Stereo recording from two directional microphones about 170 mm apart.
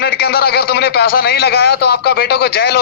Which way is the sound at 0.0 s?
70° left (ahead or behind).